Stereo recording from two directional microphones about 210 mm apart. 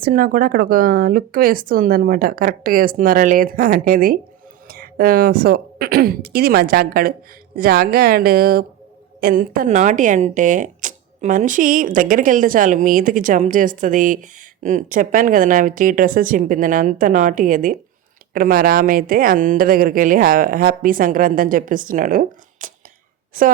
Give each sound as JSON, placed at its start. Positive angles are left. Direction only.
{"t": 0.0, "sound": "speech", "side_deg": -45}